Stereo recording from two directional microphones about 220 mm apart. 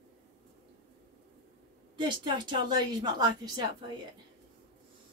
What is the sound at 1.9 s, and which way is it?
A woman's voice, 20° right (ahead or behind).